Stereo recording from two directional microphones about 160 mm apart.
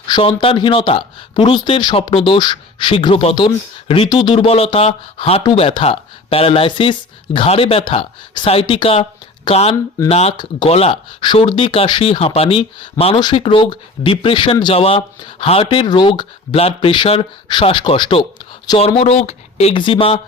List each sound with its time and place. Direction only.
0.1 s speech: 30° left (ahead or behind)
18.8 s speech: 40° left (ahead or behind)